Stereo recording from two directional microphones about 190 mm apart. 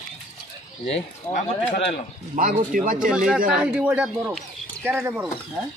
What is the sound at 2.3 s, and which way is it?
Speech, 45° right (ahead or behind).